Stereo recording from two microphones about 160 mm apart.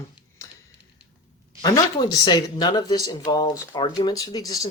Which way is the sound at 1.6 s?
25° left (ahead or behind).